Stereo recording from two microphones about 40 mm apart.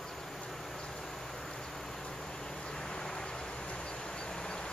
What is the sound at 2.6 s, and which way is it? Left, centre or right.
Vehicle, centre.